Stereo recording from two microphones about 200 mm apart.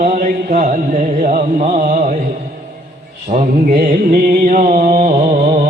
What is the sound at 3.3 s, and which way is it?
Mantra, 35° right (ahead or behind).